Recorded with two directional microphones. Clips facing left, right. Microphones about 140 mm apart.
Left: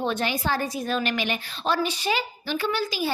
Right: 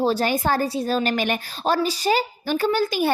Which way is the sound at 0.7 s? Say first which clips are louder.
Right 4 dB; 30° right (ahead or behind).